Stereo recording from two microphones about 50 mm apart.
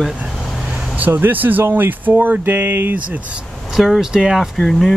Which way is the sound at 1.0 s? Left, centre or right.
Right.